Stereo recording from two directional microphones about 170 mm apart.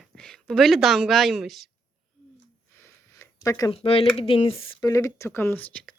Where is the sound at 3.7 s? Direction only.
35° left (ahead or behind).